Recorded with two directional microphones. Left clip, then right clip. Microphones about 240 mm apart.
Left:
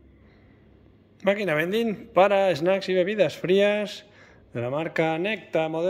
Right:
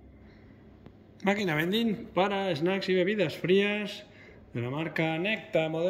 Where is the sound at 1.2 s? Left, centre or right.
Centre.